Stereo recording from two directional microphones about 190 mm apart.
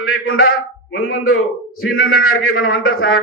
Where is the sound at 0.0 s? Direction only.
90° left.